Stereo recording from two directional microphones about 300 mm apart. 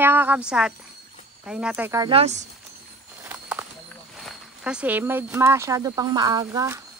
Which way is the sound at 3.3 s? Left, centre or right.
Centre.